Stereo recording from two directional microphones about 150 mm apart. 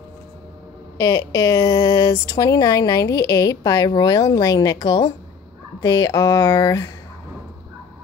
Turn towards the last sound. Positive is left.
turn(degrees=25)  # may be behind; listen again after turning